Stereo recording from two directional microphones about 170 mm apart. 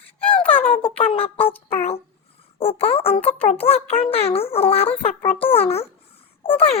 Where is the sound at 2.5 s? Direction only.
35° left (ahead or behind).